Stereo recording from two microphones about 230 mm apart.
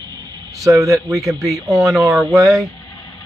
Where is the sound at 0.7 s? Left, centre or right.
Centre.